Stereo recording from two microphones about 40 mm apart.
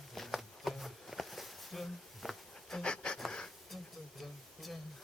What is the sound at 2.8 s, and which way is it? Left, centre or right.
Pant, left.